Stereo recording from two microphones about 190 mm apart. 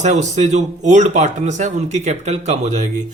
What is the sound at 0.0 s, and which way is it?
A man's voice, 35° right (ahead or behind).